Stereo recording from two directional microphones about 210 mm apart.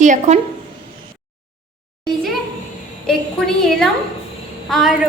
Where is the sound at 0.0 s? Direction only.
35° right (ahead or behind).